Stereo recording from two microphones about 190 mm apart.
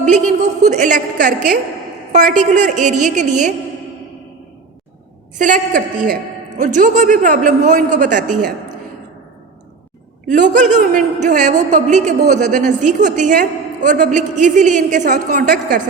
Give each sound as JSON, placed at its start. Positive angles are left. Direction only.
{"t": 0.7, "sound": "a woman's voice", "side_deg": -40}
{"t": 5.4, "sound": "a man's voice", "side_deg": -45}
{"t": 10.2, "sound": "a woman's voice", "side_deg": -40}